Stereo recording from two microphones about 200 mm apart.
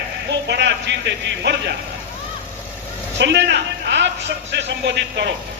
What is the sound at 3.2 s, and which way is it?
A man's voice, 60° right (ahead or behind).